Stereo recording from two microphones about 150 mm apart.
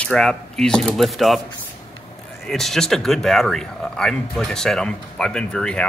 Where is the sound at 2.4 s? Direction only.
Centre (ahead or behind).